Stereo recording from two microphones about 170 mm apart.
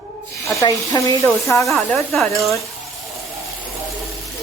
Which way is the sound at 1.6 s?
Centre (ahead or behind).